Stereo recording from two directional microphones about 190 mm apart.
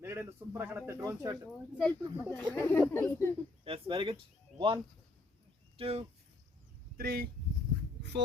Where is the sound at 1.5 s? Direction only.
Centre (ahead or behind).